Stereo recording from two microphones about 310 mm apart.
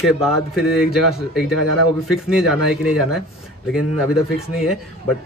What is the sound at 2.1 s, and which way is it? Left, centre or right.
Speech, centre.